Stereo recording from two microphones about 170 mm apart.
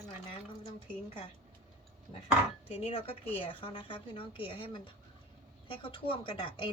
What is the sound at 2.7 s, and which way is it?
A woman's voice, 35° left (ahead or behind).